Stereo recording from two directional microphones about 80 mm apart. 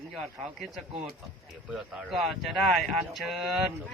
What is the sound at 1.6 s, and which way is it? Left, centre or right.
Speech, centre.